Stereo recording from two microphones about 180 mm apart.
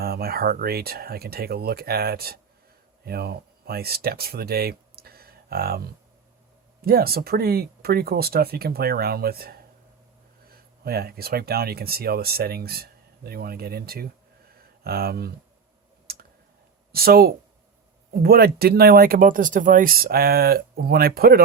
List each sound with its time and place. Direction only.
0.0 s speech: 60° right (ahead or behind)
16.1 s clicking: 60° right (ahead or behind)
16.9 s speech: 55° right (ahead or behind)